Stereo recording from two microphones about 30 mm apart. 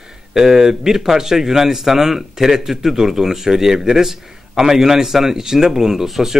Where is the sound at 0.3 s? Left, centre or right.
Centre.